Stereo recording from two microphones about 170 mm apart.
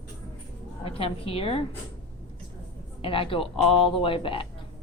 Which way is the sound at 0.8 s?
35° left (ahead or behind).